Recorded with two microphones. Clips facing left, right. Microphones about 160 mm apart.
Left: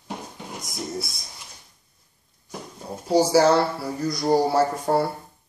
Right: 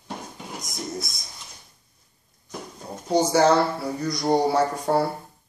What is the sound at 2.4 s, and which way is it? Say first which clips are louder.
Speech: left 1 dB; 5° left (ahead or behind).